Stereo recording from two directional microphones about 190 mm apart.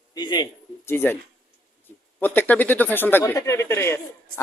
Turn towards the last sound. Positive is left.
turn(degrees=15)  # may be behind; listen again after turning